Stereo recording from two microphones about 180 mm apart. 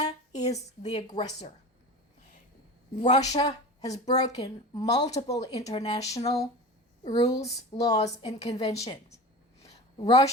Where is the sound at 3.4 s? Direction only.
25° left (ahead or behind).